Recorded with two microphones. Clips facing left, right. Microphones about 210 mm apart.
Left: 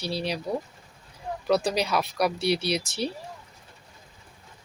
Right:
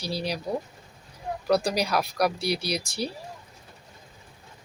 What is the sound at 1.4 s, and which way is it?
Speech, centre (ahead or behind).